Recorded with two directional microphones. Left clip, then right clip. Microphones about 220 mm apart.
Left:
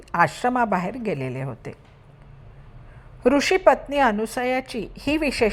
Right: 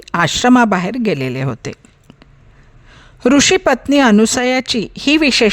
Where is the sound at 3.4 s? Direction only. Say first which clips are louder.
Right 5 dB; 50° right (ahead or behind).